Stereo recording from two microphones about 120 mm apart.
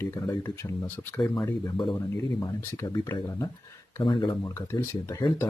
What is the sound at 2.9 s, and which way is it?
Speech, 35° left (ahead or behind).